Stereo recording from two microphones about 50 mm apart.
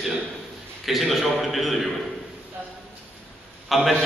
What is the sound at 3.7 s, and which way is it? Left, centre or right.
Speech, centre.